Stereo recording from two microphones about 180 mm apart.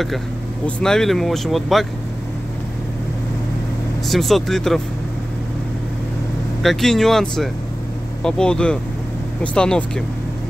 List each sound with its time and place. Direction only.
0.7 s speech: 5° left (ahead or behind)
4.1 s speech: centre (ahead or behind)
6.6 s speech: centre (ahead or behind)